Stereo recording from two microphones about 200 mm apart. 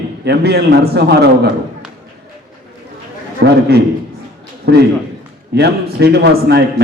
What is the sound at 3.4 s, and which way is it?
Speech, 55° right (ahead or behind).